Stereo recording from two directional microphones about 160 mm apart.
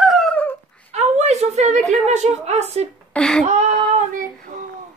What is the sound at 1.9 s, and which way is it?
Speech, 45° right (ahead or behind).